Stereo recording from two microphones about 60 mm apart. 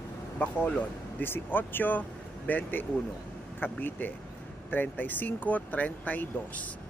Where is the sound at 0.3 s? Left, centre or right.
Left.